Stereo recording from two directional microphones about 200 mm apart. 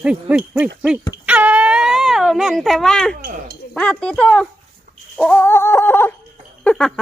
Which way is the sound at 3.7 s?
5° left (ahead or behind).